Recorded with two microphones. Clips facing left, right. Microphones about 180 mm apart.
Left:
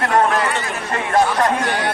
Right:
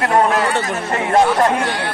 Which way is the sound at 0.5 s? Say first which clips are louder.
Right 4 dB; 40° right (ahead or behind).